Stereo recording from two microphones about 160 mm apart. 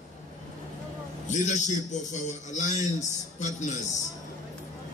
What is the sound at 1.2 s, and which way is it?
A man's voice, 50° left (ahead or behind).